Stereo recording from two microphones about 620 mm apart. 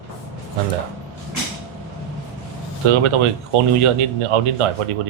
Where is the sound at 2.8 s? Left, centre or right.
Right.